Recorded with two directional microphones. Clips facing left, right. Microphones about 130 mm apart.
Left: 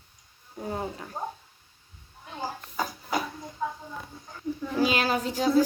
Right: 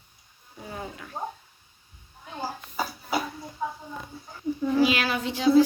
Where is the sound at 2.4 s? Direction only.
10° right (ahead or behind).